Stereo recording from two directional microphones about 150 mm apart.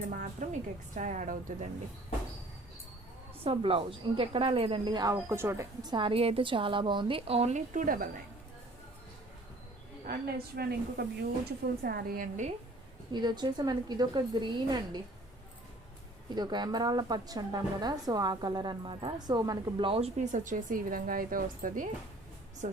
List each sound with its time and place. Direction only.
0.1 s a woman's voice: 65° right (ahead or behind)
3.4 s a woman's voice: 35° right (ahead or behind)
5.1 s a woman's voice: 15° right (ahead or behind); by 8.1 s 65° right (ahead or behind)
10.1 s a woman's voice: 90° right; by 12.5 s 70° right (ahead or behind)
13.1 s a woman's voice: 30° right (ahead or behind)
16.3 s a woman's voice: 30° right (ahead or behind)
19.9 s speech: 45° right (ahead or behind); by 21.8 s 65° right (ahead or behind)
22.6 s a woman's voice: 50° right (ahead or behind)